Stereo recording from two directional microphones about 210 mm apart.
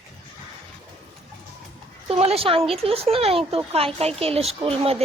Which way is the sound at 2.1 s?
25° right (ahead or behind).